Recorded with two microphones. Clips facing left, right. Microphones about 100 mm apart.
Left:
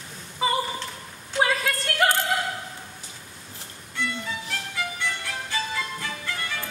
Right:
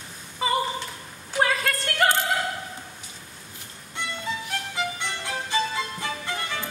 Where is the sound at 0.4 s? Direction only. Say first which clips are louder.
Even; centre (ahead or behind).